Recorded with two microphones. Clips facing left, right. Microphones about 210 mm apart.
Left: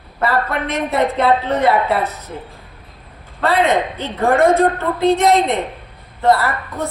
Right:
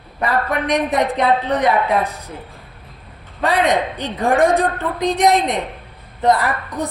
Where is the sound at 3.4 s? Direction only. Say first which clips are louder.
Left 1 dB; 15° right (ahead or behind).